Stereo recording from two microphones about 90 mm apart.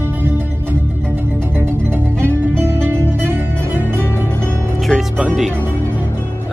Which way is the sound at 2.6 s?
30° right (ahead or behind).